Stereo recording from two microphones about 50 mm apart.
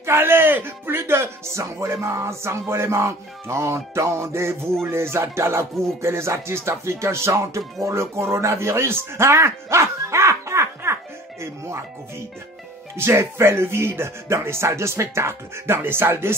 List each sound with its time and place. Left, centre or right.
0.0 s speech: right
12.9 s speech: right